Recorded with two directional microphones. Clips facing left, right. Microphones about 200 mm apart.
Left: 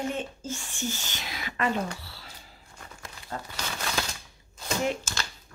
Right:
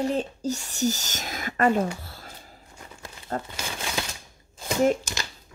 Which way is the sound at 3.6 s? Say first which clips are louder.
Right 1 dB; 10° right (ahead or behind).